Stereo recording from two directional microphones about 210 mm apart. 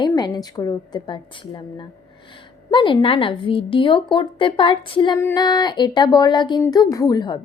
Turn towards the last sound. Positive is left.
turn(degrees=20)  # may be behind; listen again after turning